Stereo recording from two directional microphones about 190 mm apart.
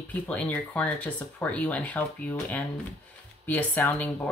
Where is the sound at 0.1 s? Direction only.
5° left (ahead or behind).